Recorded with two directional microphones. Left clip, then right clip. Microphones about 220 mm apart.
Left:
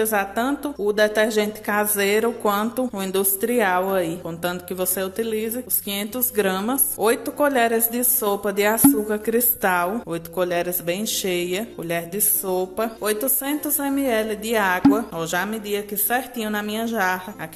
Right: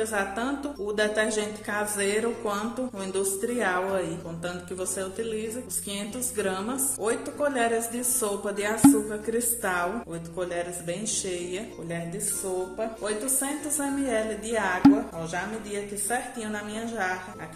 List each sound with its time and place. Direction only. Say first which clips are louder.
0.0 s a woman's voice: left 6 dB; 40° left (ahead or behind)